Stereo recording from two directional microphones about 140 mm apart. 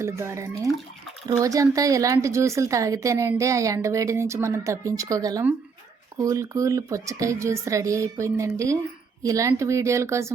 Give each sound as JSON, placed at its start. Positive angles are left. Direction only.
{"t": 0.0, "sound": "a woman's voice", "side_deg": -20}